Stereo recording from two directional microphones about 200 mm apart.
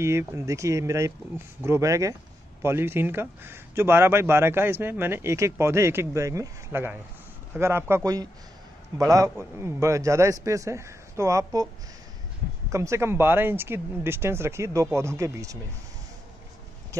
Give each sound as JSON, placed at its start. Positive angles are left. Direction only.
{"t": 0.0, "sound": "speech", "side_deg": -15}
{"t": 12.7, "sound": "speech", "side_deg": -15}
{"t": 16.9, "sound": "a sound", "side_deg": -15}